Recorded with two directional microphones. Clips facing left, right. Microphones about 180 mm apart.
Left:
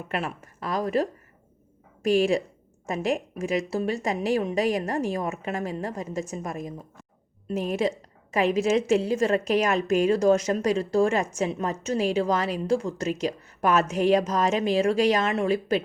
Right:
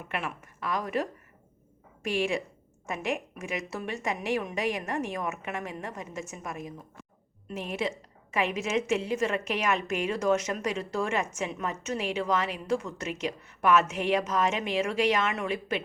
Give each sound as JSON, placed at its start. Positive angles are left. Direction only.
{"t": 0.1, "sound": "a woman's voice", "side_deg": 35}
{"t": 2.0, "sound": "a woman's voice", "side_deg": 35}